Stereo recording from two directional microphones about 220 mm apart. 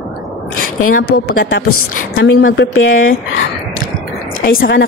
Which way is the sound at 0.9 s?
40° left (ahead or behind).